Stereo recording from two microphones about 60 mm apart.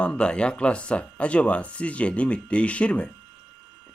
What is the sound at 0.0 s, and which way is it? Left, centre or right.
Speech, centre.